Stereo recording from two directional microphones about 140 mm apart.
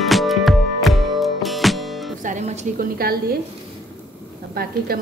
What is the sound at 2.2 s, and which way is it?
A woman's voice, 60° right (ahead or behind).